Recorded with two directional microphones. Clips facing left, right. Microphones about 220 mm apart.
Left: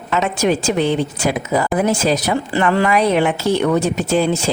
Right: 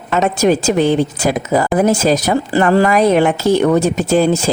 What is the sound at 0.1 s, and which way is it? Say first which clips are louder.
Speech: right 4 dB; 45° right (ahead or behind).